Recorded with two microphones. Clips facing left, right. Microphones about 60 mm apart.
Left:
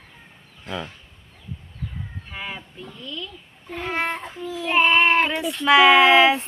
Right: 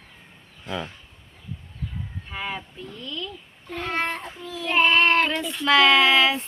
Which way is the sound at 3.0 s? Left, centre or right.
Centre.